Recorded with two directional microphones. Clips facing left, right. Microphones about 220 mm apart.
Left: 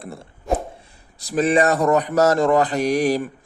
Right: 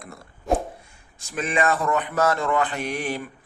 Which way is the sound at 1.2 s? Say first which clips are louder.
Left 7 dB; 35° left (ahead or behind).